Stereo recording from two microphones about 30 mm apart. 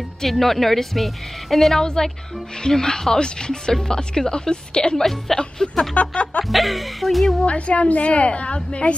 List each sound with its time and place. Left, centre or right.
0.3 s a woman's voice: centre
1.8 s speech: left
5.0 s a woman's voice: centre
5.6 s speech: left
5.9 s music: left
6.4 s speech: centre
7.4 s a woman's voice: left